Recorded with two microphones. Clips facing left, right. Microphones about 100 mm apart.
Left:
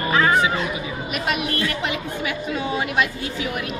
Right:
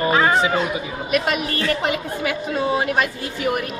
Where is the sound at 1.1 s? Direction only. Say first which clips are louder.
Right 4 dB; 40° right (ahead or behind).